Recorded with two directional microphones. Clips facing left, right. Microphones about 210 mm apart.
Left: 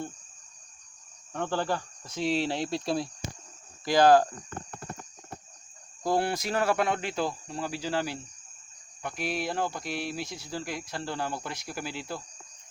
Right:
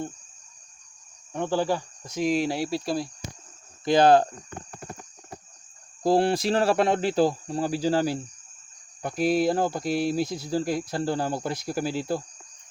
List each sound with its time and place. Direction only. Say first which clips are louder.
1.3 s speech: right 4 dB; 15° right (ahead or behind)
3.8 s speech: right 2 dB; 20° right (ahead or behind)
6.0 s speech: right 6 dB; 30° right (ahead or behind)